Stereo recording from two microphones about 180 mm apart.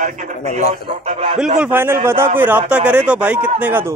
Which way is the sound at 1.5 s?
10° right (ahead or behind).